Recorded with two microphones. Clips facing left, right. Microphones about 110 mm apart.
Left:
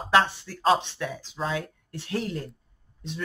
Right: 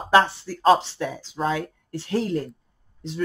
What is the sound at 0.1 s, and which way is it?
Speech, 40° right (ahead or behind).